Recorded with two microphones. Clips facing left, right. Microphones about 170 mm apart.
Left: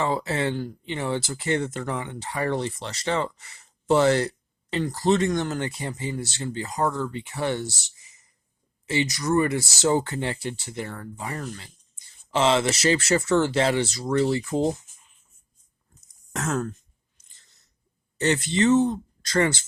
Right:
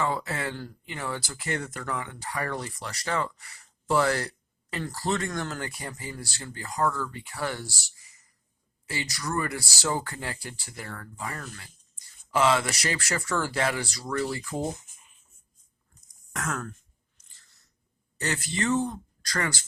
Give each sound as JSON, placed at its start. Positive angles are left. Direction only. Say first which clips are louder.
{"t": 0.0, "sound": "speech", "louder": "left 4 dB", "side_deg": 25}
{"t": 16.3, "sound": "speech", "louder": "left 6 dB", "side_deg": 25}
{"t": 17.2, "sound": "a sound", "louder": "left 1 dB", "side_deg": 20}
{"t": 18.2, "sound": "speech", "louder": "left 8 dB", "side_deg": 25}